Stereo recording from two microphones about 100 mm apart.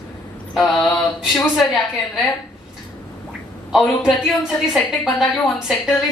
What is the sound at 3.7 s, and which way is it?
A woman's voice, centre (ahead or behind).